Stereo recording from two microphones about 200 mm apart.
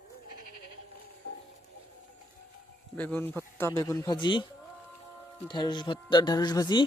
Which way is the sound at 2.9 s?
10° left (ahead or behind).